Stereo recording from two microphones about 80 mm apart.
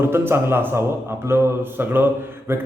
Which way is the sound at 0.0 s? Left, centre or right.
Right.